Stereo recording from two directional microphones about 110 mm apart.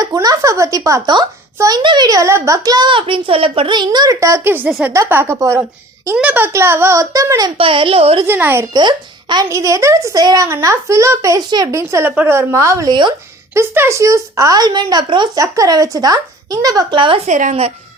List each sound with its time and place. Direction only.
0.0 s a child's voice: 35° right (ahead or behind); by 3.8 s 60° right (ahead or behind)
3.8 s a woman's voice: 35° right (ahead or behind)
6.1 s a woman's voice: 15° right (ahead or behind); by 7.5 s 35° right (ahead or behind)
7.6 s a woman's voice: 55° right (ahead or behind)
8.3 s a woman's voice: 20° right (ahead or behind)
8.7 s speech: 40° right (ahead or behind)
9.5 s a woman's voice: 30° right (ahead or behind)
12.9 s speech: 45° right (ahead or behind)
13.5 s a child's voice: 25° right (ahead or behind)
16.9 s speech: 50° right (ahead or behind)
17.2 s speech: 80° right